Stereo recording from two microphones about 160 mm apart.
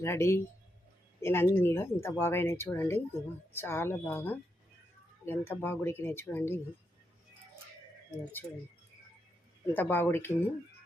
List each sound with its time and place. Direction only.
0.0 s speech: 15° left (ahead or behind)
9.7 s speech: 15° left (ahead or behind)